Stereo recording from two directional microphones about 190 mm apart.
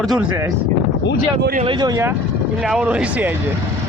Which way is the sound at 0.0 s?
Centre (ahead or behind).